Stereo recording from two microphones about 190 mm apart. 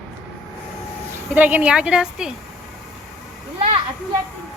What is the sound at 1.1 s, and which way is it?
A woman's voice, 10° right (ahead or behind).